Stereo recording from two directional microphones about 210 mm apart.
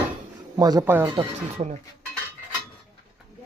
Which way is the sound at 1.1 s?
35° right (ahead or behind).